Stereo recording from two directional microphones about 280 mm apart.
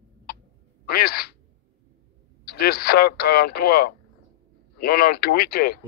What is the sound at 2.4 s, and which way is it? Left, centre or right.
Speech, left.